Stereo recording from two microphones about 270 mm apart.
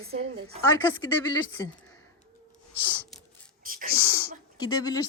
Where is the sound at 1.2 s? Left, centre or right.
Centre.